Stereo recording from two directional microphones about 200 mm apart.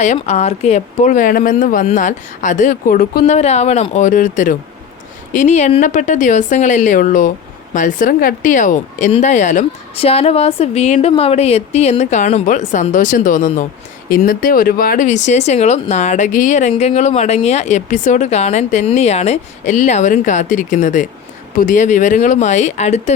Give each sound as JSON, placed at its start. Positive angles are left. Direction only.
{"t": 0.0, "sound": "speech", "side_deg": 35}
{"t": 3.3, "sound": "speech", "side_deg": 35}